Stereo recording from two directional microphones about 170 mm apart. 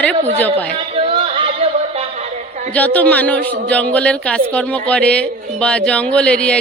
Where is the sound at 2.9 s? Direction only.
10° left (ahead or behind).